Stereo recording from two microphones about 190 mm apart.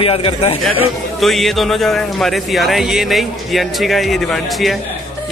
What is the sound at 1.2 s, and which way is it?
Speech, centre (ahead or behind).